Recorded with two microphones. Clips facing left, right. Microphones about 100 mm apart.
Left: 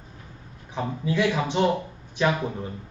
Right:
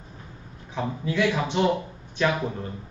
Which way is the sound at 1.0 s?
15° left (ahead or behind).